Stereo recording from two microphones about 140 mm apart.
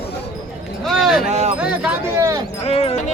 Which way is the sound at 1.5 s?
10° right (ahead or behind).